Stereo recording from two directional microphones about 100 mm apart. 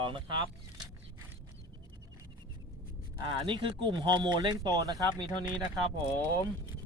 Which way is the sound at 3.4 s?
55° right (ahead or behind).